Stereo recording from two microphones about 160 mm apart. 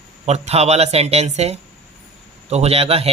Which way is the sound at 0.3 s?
45° right (ahead or behind).